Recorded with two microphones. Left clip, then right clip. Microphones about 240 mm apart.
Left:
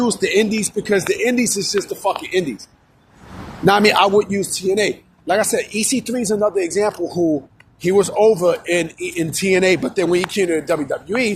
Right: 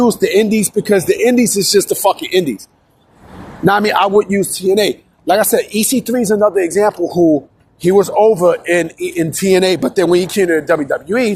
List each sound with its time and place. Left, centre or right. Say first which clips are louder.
0.0 s speech: right 5 dB; right
1.8 s speech: right 7 dB; right
3.6 s speech: right 1 dB; centre
4.4 s speech: right 5 dB; right